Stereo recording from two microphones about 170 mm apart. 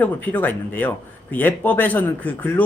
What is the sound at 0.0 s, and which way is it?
Speech, 10° left (ahead or behind).